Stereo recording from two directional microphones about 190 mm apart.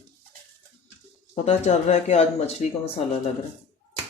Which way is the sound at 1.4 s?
35° left (ahead or behind).